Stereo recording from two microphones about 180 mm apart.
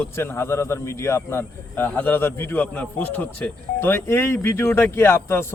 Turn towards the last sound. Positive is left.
turn(degrees=15)  # may be behind; listen again after turning